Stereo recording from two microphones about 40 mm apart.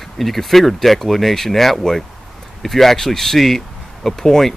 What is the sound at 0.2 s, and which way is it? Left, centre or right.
Speech, centre.